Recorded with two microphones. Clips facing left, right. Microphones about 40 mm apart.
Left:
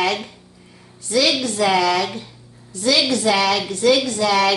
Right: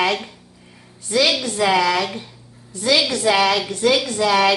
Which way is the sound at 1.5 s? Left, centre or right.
Centre.